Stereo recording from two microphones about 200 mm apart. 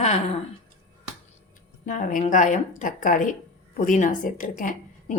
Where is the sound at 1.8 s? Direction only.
40° left (ahead or behind).